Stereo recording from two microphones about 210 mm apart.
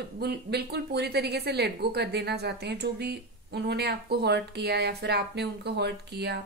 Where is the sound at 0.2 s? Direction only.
50° right (ahead or behind).